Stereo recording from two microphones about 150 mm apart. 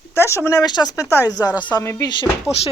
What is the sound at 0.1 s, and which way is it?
Speech, 15° left (ahead or behind).